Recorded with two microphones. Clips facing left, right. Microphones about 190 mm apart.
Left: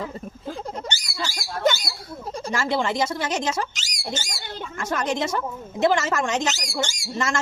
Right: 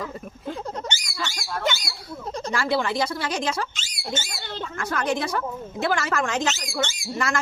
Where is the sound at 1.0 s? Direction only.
30° left (ahead or behind).